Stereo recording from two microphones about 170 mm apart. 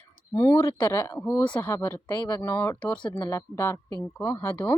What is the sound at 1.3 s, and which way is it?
Speech, 25° left (ahead or behind).